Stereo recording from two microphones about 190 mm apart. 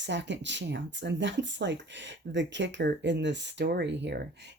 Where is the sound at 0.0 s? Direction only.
70° right (ahead or behind).